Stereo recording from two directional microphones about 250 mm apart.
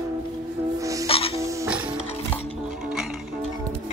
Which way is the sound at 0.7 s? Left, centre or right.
Centre.